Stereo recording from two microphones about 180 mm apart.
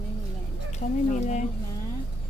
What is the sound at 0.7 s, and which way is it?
Speech, 40° left (ahead or behind).